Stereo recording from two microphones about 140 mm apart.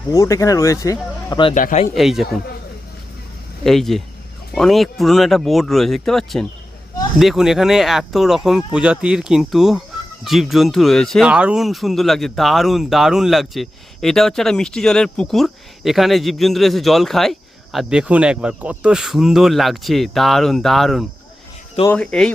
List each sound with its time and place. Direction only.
0.1 s speech: 20° left (ahead or behind)
2.0 s speech: centre (ahead or behind)
3.6 s speech: 5° left (ahead or behind)